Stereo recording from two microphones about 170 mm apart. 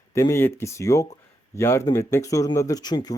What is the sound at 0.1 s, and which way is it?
Speech, 15° left (ahead or behind).